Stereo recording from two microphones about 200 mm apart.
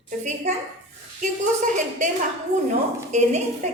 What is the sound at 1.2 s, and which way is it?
Speech, 40° right (ahead or behind).